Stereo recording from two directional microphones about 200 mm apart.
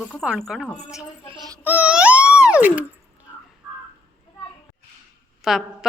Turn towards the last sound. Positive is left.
turn(degrees=0)  # may be behind; listen again after turning